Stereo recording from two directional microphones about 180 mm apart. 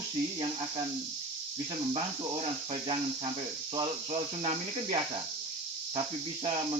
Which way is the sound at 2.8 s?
30° right (ahead or behind).